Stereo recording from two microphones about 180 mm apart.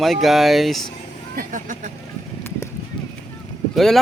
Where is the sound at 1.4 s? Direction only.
50° right (ahead or behind).